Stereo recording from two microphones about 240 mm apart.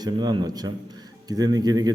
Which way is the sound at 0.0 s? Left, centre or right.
Centre.